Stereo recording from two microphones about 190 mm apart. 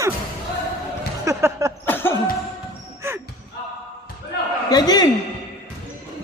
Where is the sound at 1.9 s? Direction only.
10° left (ahead or behind).